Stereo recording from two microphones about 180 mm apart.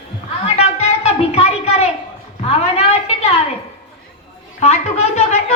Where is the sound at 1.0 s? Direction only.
35° left (ahead or behind).